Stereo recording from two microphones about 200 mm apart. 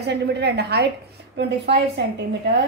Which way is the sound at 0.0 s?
55° right (ahead or behind).